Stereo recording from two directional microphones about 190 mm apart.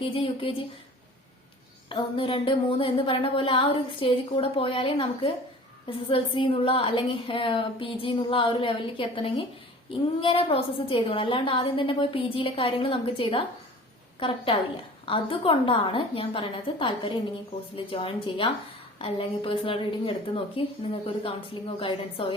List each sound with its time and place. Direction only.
0.0 s a woman's voice: 30° left (ahead or behind)
1.9 s a woman's voice: 25° left (ahead or behind)
21.8 s a woman's voice: 25° left (ahead or behind)